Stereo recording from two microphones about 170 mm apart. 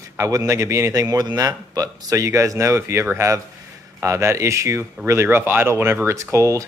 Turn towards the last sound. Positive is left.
turn(degrees=-15)  # may be behind; listen again after turning